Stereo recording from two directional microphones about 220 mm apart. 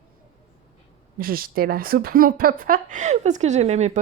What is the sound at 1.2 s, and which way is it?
Speech, 40° right (ahead or behind).